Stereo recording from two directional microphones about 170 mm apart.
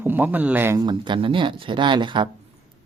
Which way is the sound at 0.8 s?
25° right (ahead or behind).